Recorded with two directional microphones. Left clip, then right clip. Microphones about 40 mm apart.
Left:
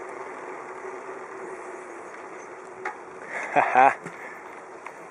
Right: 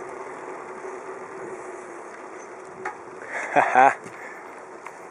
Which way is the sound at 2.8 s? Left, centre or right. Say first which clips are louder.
Right 1 dB; centre.